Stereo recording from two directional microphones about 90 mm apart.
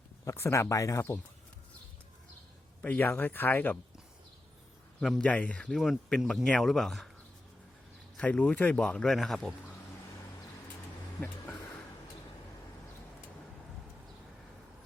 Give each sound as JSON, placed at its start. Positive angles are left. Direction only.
{"t": 0.3, "sound": "speech", "side_deg": 35}
{"t": 2.8, "sound": "speech", "side_deg": 20}
{"t": 4.9, "sound": "speech", "side_deg": 5}
{"t": 5.7, "sound": "speech", "side_deg": 0}
{"t": 8.2, "sound": "speech", "side_deg": 15}